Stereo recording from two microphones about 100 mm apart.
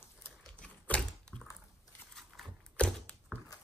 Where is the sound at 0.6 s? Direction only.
10° left (ahead or behind).